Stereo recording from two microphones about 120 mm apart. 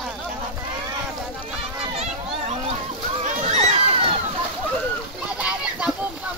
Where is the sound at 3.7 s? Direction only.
55° right (ahead or behind).